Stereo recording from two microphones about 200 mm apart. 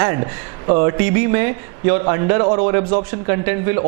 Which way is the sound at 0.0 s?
20° right (ahead or behind).